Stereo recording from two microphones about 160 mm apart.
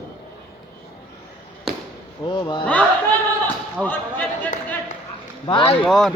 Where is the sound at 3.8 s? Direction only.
5° left (ahead or behind).